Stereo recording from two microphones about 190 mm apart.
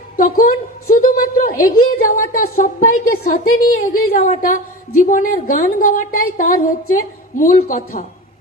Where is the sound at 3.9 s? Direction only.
45° left (ahead or behind).